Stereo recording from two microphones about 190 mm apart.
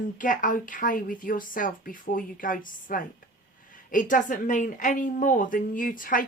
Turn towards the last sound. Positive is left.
turn(degrees=45)  # may be behind; listen again after turning